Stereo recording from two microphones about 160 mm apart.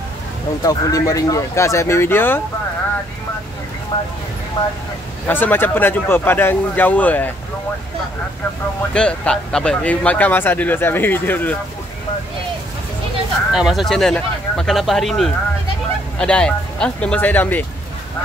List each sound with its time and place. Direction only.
0.6 s speech: 20° left (ahead or behind)
3.9 s speech: 25° left (ahead or behind)
5.3 s speech: 10° left (ahead or behind)
8.9 s speech: 5° left (ahead or behind)
13.5 s speech: 5° right (ahead or behind)